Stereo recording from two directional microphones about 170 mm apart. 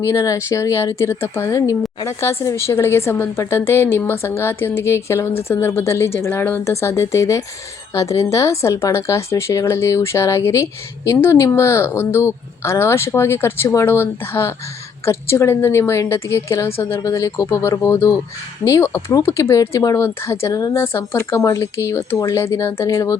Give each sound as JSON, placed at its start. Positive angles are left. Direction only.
{"t": 0.0, "sound": "a woman's voice", "side_deg": 15}